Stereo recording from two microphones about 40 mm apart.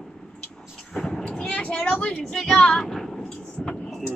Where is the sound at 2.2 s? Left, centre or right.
Centre.